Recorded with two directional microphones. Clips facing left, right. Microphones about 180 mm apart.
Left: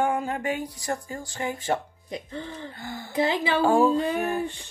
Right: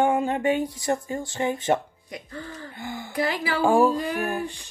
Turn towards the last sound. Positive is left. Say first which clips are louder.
# even
turn(degrees=25)  # may be behind; listen again after turning